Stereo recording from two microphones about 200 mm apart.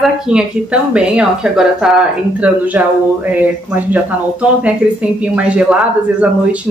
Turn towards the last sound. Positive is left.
turn(degrees=-5)  # may be behind; listen again after turning